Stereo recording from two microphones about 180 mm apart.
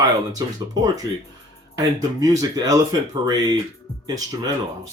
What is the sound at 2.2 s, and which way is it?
Speech, 20° right (ahead or behind).